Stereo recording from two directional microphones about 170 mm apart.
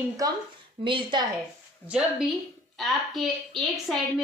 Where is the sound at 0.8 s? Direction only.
30° right (ahead or behind).